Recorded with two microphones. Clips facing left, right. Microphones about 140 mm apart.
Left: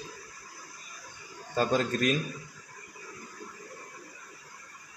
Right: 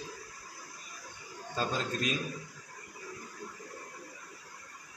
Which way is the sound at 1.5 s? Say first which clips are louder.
Left 7 dB; 55° left (ahead or behind).